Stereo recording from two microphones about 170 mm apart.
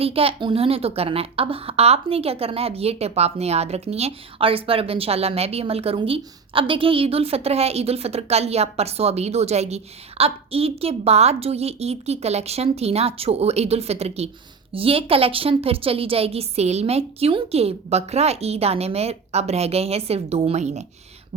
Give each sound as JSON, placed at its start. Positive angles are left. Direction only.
{"t": 0.0, "sound": "a woman's voice", "side_deg": -35}